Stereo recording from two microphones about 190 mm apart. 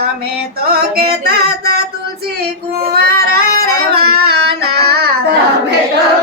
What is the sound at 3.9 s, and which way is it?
Singing, 55° right (ahead or behind).